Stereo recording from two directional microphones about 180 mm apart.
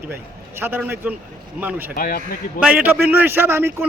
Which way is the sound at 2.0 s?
55° left (ahead or behind).